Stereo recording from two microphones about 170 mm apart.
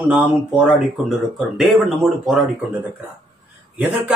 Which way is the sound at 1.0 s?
5° right (ahead or behind).